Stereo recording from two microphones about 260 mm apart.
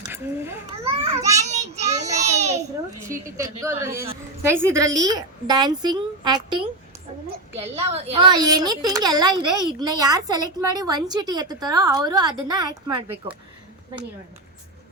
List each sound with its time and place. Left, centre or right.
1.0 s children playing: centre
1.5 s child singing: right
3.0 s speech: centre
7.6 s speech: right